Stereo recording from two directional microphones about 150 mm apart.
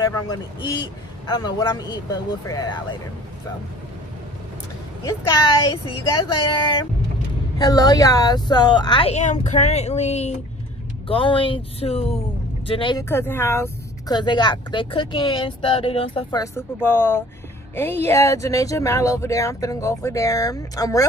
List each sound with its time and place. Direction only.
0.0 s speech: 30° left (ahead or behind)
5.0 s speech: 25° left (ahead or behind)
9.1 s speech: 50° left (ahead or behind)
11.1 s speech: 35° left (ahead or behind)
13.1 s speech: 15° left (ahead or behind)
14.1 s speech: 30° left (ahead or behind)
16.3 s speech: 20° left (ahead or behind)